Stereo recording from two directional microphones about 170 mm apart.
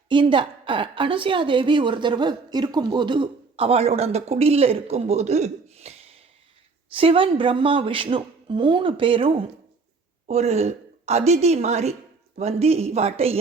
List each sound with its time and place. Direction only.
0.1 s a woman's voice: 30° right (ahead or behind)
6.9 s a woman's voice: 30° right (ahead or behind)